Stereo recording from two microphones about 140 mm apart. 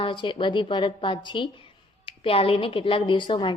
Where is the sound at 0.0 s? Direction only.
35° left (ahead or behind).